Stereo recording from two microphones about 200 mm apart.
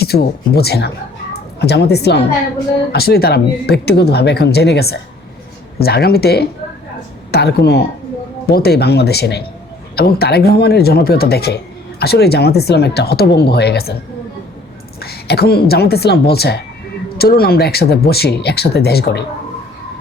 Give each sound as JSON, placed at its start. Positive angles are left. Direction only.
{"t": 0.0, "sound": "speech", "side_deg": 50}
{"t": 15.0, "sound": "speech", "side_deg": 50}